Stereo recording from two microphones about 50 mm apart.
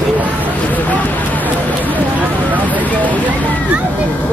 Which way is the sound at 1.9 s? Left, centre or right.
Right.